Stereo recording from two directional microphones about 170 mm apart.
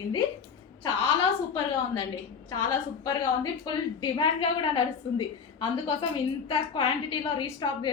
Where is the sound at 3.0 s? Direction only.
20° left (ahead or behind).